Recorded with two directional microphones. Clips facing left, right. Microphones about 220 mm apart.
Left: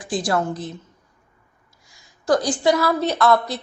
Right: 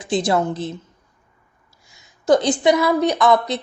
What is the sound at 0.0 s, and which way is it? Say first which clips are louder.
Speech: right 3 dB; 25° right (ahead or behind).